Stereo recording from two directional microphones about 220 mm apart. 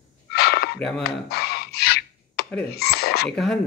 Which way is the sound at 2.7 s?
45° left (ahead or behind).